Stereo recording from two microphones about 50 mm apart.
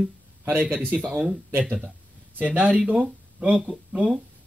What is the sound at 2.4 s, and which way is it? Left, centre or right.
Speech, right.